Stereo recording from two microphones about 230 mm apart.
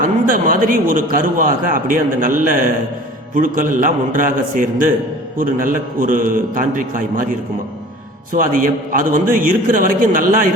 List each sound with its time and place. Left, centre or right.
0.0 s a man's voice: right